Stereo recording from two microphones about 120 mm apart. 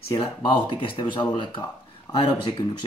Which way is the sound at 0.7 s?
45° left (ahead or behind).